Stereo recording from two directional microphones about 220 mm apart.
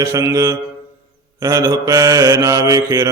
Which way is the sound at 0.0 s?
15° right (ahead or behind).